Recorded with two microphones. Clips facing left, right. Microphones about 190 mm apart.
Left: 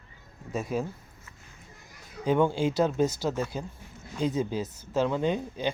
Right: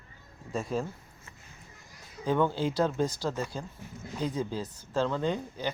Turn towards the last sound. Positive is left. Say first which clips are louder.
# left 3 dB
turn(degrees=20)  # may be behind; listen again after turning